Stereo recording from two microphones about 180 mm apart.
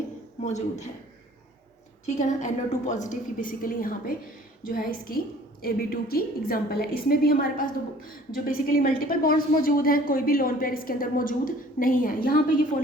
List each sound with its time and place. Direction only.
0.4 s speech: 40° left (ahead or behind)
2.1 s a woman's voice: 40° left (ahead or behind)